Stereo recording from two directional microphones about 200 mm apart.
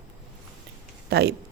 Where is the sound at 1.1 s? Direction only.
55° right (ahead or behind).